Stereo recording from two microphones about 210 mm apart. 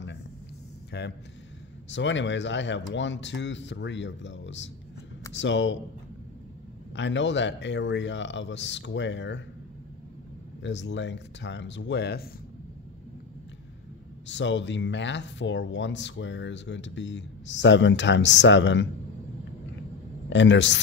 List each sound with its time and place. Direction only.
0.9 s speech: 55° left (ahead or behind)
7.0 s speech: 60° left (ahead or behind)
10.6 s speech: 55° left (ahead or behind)
14.2 s speech: 60° left (ahead or behind)
20.2 s speech: 60° left (ahead or behind)